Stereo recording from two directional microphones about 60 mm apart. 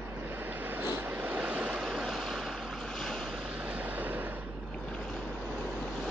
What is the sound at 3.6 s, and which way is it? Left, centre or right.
Vehicle, right.